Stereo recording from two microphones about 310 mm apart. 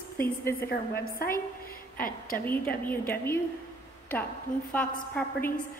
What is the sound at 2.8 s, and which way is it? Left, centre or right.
Speech, centre.